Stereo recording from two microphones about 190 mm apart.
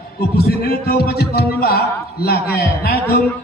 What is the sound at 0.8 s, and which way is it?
A man's voice, 55° left (ahead or behind).